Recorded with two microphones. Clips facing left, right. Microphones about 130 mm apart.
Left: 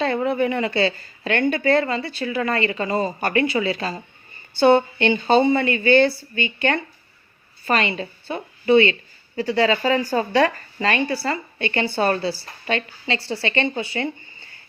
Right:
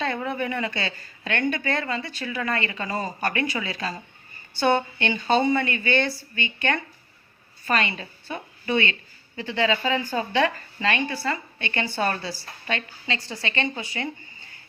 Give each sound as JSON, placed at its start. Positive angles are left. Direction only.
{"t": 0.0, "sound": "speech", "side_deg": 30}